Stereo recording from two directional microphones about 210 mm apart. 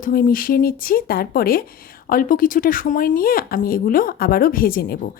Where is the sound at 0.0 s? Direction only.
45° left (ahead or behind).